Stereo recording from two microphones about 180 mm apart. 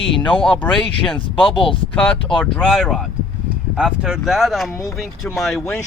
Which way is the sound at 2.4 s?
Centre (ahead or behind).